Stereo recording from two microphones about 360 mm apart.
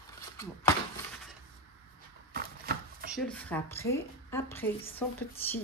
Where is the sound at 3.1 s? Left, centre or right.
Centre.